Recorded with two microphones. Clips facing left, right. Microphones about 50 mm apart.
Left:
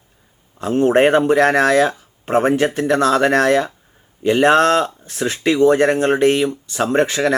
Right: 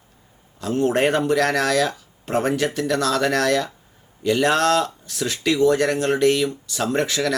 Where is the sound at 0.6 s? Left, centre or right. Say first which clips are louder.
Left 6 dB; left.